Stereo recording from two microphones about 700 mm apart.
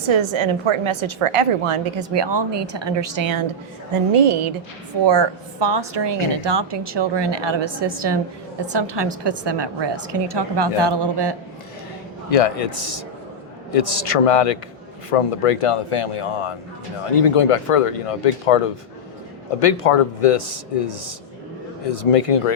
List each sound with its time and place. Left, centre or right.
0.1 s a woman's voice: right
12.3 s speech: left